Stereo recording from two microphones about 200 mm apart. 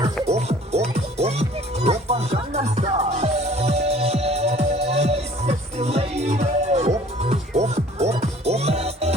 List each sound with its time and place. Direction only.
0.3 s music: 30° right (ahead or behind)